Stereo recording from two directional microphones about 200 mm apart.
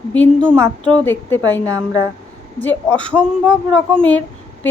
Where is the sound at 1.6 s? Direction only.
15° right (ahead or behind).